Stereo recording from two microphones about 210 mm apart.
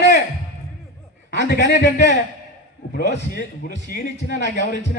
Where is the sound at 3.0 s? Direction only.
40° left (ahead or behind).